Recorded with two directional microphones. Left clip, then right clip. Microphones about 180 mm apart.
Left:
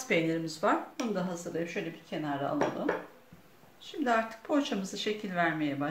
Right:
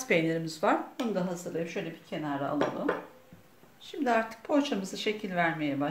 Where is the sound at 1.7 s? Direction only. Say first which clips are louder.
Even; 15° right (ahead or behind).